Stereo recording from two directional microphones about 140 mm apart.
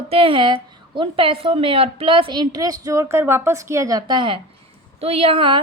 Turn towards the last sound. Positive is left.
turn(degrees=-40)  # may be behind; listen again after turning